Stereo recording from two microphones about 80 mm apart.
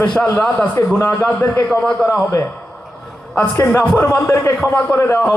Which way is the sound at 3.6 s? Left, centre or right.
Left.